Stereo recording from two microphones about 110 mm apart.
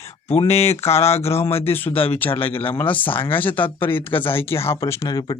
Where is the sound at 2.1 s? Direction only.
15° left (ahead or behind).